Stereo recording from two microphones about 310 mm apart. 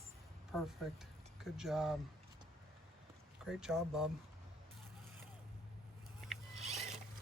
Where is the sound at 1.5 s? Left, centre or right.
Centre.